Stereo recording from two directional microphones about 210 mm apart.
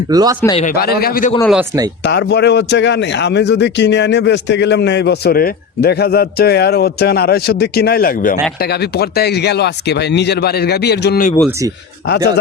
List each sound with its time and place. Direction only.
0.1 s a man's voice: 15° right (ahead or behind)
0.8 s a man's voice: 45° left (ahead or behind)